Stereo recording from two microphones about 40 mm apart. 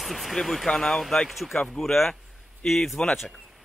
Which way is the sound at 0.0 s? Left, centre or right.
Centre.